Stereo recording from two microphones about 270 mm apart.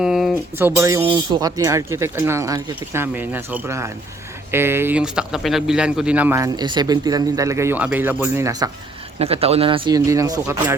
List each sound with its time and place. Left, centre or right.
0.0 s a man's voice: centre